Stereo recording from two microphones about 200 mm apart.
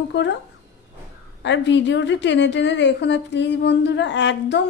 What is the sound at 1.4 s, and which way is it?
A woman's voice, 65° left (ahead or behind).